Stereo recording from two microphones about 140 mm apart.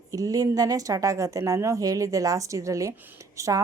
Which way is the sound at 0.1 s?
25° right (ahead or behind).